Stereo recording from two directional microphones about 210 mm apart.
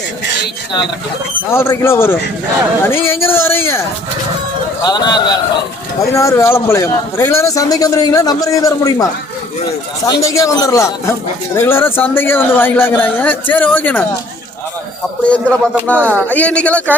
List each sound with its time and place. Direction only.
1.5 s a man's voice: 10° left (ahead or behind)
10.1 s a man's voice: 15° left (ahead or behind)
15.3 s a man's voice: 5° left (ahead or behind)